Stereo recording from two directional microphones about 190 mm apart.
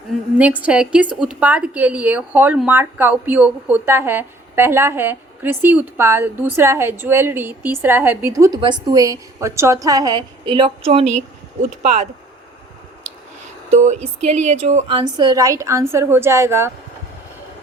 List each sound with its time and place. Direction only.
0.1 s a woman's voice: 10° right (ahead or behind); by 12.0 s 40° right (ahead or behind)
13.7 s speech: 40° right (ahead or behind)
14.8 s speech: 25° right (ahead or behind)